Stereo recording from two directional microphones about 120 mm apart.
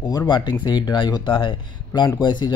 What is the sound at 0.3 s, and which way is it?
Speech, 35° left (ahead or behind).